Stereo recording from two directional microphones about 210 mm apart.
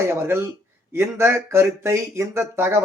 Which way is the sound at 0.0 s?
10° right (ahead or behind).